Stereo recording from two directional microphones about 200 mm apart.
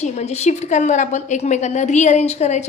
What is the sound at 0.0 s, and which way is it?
A woman's voice, 35° left (ahead or behind).